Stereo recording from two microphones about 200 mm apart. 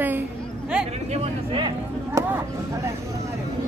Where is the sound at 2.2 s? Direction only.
15° right (ahead or behind).